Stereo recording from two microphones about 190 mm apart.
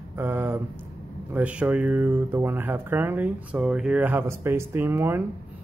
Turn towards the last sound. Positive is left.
turn(degrees=-10)  # may be behind; listen again after turning